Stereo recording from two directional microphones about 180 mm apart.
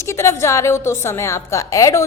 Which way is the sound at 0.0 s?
15° left (ahead or behind).